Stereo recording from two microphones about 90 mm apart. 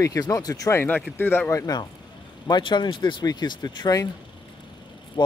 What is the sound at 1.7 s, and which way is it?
Speech, 50° left (ahead or behind).